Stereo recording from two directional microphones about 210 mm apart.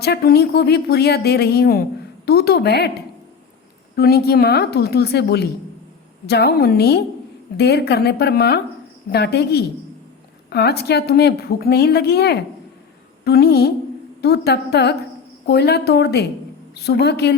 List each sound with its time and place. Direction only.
0.0 s a woman's voice: 50° left (ahead or behind)
3.9 s a woman's voice: 50° left (ahead or behind)